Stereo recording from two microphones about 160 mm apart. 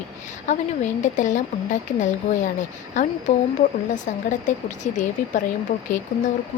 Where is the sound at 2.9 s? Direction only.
50° left (ahead or behind).